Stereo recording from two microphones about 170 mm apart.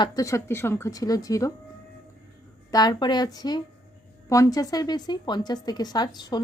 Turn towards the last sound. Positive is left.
turn(degrees=25)  # may be behind; listen again after turning